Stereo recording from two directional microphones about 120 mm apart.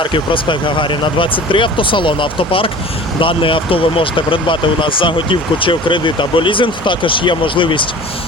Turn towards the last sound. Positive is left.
turn(degrees=45)  # may be behind; listen again after turning